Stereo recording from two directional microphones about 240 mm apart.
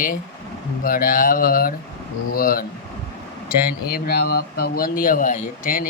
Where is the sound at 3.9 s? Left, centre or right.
Left.